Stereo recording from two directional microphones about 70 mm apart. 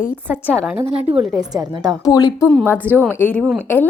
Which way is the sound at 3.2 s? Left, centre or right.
Centre.